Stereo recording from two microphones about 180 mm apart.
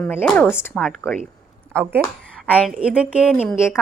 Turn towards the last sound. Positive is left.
turn(degrees=-5)  # may be behind; listen again after turning